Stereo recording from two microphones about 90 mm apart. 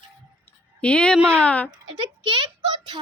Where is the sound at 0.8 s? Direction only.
10° left (ahead or behind).